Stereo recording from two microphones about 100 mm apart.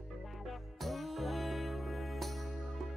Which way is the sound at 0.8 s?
Centre (ahead or behind).